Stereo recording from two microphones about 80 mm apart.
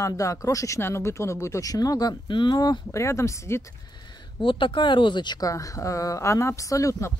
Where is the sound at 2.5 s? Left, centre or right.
Left.